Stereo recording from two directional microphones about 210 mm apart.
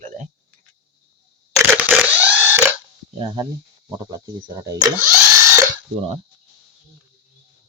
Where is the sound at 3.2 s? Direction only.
20° right (ahead or behind).